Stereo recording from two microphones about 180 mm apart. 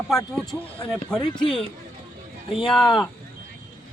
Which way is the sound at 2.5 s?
Centre (ahead or behind).